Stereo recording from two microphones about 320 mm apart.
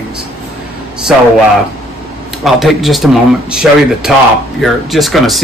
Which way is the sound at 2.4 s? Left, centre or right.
Centre.